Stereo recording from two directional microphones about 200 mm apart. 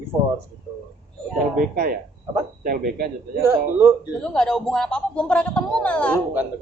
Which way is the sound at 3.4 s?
15° right (ahead or behind).